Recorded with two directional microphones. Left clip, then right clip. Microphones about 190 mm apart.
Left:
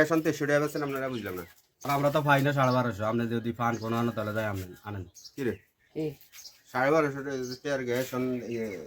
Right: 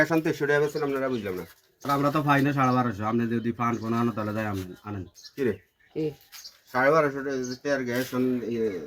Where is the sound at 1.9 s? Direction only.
5° left (ahead or behind).